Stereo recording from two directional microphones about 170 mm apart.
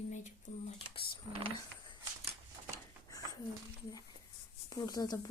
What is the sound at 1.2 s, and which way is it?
Speech, 35° right (ahead or behind).